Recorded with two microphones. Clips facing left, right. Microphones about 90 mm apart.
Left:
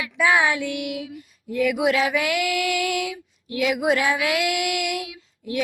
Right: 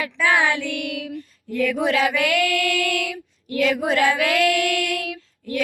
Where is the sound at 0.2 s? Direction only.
10° left (ahead or behind).